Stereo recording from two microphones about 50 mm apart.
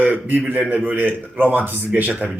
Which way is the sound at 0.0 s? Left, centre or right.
Right.